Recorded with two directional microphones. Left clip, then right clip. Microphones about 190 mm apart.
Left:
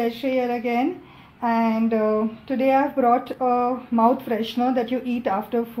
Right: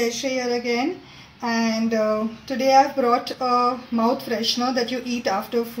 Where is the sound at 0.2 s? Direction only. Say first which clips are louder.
Left 1 dB; 35° left (ahead or behind).